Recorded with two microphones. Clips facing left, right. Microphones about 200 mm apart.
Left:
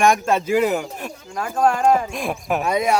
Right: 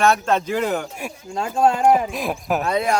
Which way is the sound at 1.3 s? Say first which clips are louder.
Right 1 dB; 25° right (ahead or behind).